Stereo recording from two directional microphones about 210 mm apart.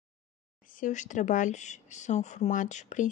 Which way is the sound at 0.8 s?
35° left (ahead or behind).